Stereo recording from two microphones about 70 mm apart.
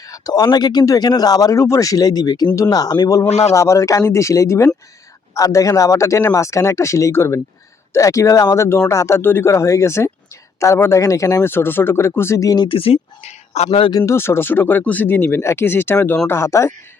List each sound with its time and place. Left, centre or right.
0.0 s speech: left
3.1 s speech: left
5.3 s speech: left
11.4 s speech: left
13.7 s speech: left
14.0 s speech: left